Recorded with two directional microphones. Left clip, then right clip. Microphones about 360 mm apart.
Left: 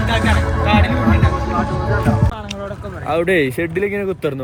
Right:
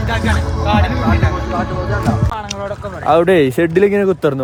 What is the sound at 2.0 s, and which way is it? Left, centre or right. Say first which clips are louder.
Music: right 1 dB; centre.